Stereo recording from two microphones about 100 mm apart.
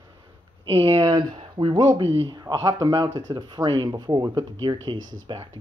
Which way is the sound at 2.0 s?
85° right.